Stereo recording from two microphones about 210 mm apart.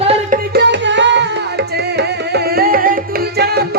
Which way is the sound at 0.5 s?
60° right (ahead or behind).